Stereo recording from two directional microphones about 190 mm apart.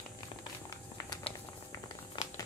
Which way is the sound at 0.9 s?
20° left (ahead or behind).